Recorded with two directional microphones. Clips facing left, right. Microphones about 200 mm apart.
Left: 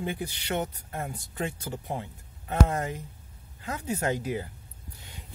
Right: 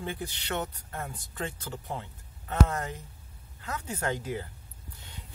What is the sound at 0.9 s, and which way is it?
Speech, 25° left (ahead or behind).